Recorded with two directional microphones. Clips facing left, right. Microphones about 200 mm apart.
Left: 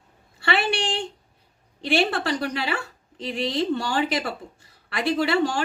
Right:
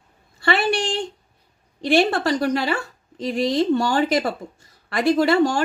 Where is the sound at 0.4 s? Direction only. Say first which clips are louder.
Right 4 dB; 40° right (ahead or behind).